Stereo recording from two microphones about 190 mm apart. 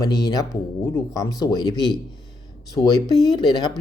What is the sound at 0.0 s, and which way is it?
Speech, 20° left (ahead or behind).